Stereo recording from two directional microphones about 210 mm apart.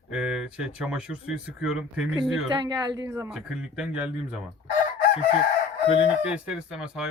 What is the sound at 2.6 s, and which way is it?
Speech, 15° right (ahead or behind).